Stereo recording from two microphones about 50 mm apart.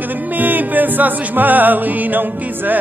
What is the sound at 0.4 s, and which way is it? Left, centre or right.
Music, right.